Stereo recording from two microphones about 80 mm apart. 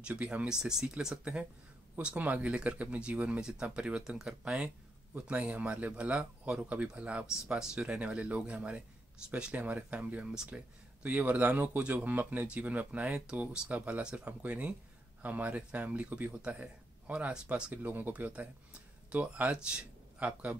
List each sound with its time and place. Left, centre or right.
0.0 s speech: centre